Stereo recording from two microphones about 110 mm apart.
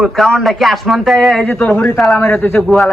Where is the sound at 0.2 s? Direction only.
Centre (ahead or behind).